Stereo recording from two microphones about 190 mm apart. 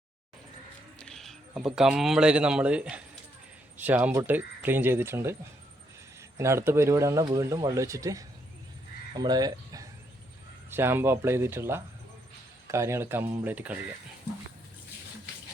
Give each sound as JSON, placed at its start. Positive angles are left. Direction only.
{"t": 0.9, "sound": "speech", "side_deg": 5}